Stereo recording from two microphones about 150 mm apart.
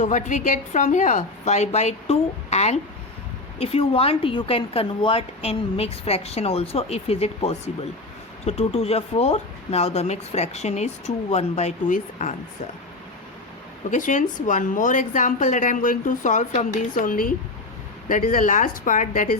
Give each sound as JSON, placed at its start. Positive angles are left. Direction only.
{"t": 0.0, "sound": "speech", "side_deg": 55}
{"t": 13.9, "sound": "a woman's voice", "side_deg": 55}